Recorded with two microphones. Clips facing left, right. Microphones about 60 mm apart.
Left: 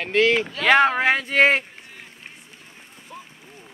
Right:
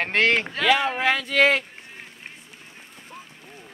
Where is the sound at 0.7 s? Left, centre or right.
Left.